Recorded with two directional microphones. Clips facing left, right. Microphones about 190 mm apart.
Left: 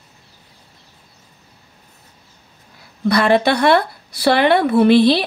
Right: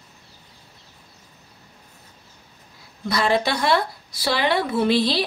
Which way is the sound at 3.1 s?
60° left (ahead or behind).